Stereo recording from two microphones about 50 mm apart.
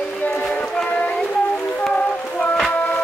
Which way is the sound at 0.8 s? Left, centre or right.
Left.